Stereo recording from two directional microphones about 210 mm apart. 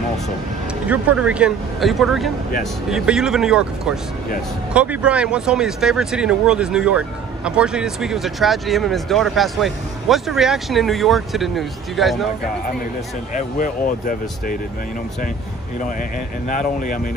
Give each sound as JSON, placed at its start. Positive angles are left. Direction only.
{"t": 0.8, "sound": "speech", "side_deg": -5}
{"t": 13.3, "sound": "speech", "side_deg": 40}
{"t": 16.0, "sound": "speech", "side_deg": 35}